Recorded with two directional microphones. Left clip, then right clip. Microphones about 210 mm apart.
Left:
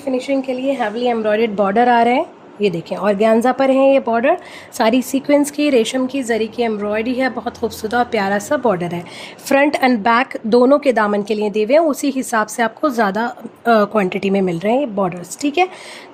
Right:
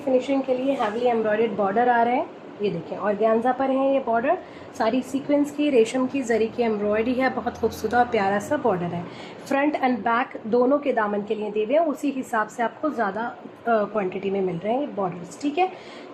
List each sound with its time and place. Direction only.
0.2 s a woman's voice: 45° left (ahead or behind)
9.5 s a woman's voice: 55° left (ahead or behind)